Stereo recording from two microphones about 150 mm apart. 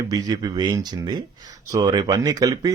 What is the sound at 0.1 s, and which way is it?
A man's voice, 25° right (ahead or behind).